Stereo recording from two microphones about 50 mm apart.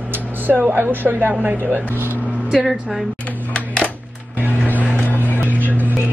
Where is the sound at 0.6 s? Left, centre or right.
Right.